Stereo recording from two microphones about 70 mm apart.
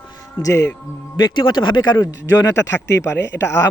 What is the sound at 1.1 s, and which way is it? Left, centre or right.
Speech, left.